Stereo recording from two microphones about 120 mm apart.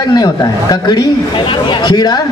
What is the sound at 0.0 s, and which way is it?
A man's voice, 35° left (ahead or behind).